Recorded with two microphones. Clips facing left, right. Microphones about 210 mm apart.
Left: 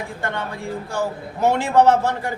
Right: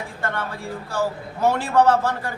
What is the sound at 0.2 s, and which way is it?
A man's voice, 20° left (ahead or behind).